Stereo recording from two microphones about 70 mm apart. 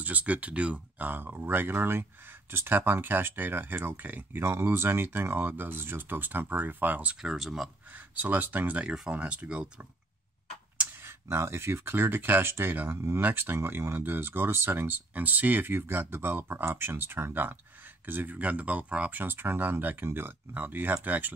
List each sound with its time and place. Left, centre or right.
0.0 s speech: right
4.4 s speech: right
7.2 s speech: centre
8.2 s speech: right
11.1 s speech: right